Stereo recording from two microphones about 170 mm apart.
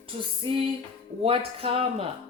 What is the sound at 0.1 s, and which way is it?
A woman's voice, 30° right (ahead or behind).